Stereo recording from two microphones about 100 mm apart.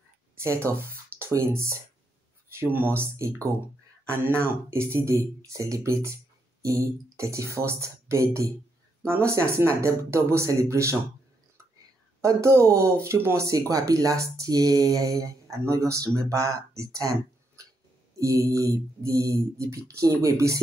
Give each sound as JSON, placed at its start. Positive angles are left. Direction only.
{"t": 0.7, "sound": "speech", "side_deg": -25}
{"t": 12.2, "sound": "speech", "side_deg": -30}
{"t": 18.2, "sound": "speech", "side_deg": -35}